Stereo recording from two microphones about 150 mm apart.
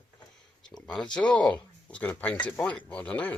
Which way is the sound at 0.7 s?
5° left (ahead or behind).